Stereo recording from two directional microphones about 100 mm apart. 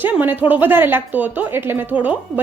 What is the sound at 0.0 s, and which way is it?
Speech, 20° right (ahead or behind).